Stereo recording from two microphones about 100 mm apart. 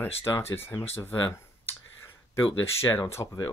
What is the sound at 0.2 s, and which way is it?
Speech, 25° left (ahead or behind).